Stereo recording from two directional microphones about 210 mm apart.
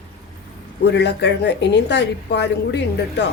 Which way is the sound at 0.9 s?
55° left (ahead or behind).